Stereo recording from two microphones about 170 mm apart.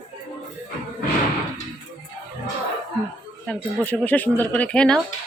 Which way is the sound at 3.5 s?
10° left (ahead or behind).